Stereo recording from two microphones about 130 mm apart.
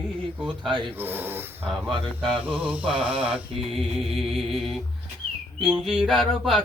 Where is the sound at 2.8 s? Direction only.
40° right (ahead or behind).